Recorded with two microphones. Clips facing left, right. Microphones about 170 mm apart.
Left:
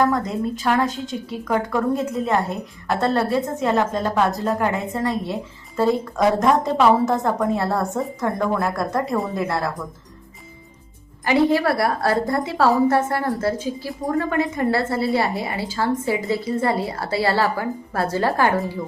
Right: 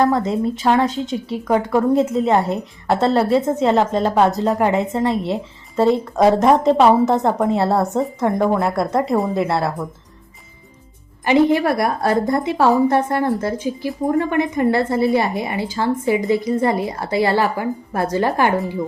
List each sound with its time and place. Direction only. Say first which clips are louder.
0.0 s a woman's voice: right 3 dB; 25° right (ahead or behind)
11.3 s a woman's voice: right 3 dB; 20° right (ahead or behind)